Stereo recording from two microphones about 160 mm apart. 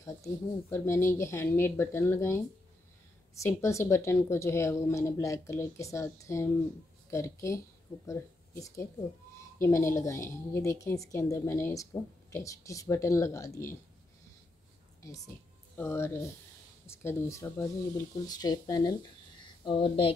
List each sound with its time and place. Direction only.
0.0 s a woman's voice: 15° left (ahead or behind)
15.0 s a woman's voice: 20° left (ahead or behind)